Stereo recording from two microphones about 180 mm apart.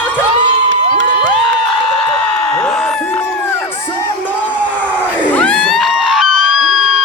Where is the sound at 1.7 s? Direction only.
5° left (ahead or behind).